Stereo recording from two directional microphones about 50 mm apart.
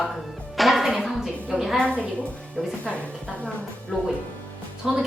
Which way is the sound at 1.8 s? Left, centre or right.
Left.